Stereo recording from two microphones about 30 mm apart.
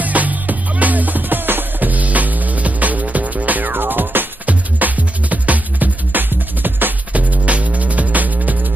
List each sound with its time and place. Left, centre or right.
0.0 s music: right
7.1 s music: right